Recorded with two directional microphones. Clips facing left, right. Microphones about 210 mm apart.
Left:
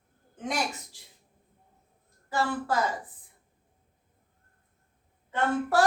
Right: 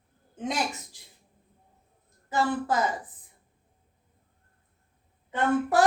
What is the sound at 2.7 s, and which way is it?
Speech, 20° right (ahead or behind).